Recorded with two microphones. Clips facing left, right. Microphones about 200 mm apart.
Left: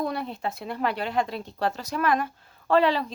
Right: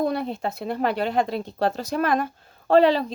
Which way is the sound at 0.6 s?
45° right (ahead or behind).